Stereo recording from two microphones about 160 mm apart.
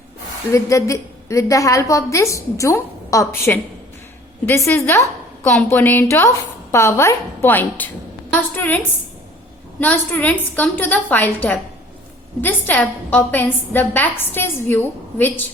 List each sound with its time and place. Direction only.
0.5 s a woman's voice: 20° left (ahead or behind)
9.8 s a woman's voice: 10° left (ahead or behind)